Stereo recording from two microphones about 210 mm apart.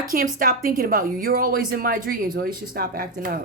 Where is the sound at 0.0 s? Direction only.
40° right (ahead or behind).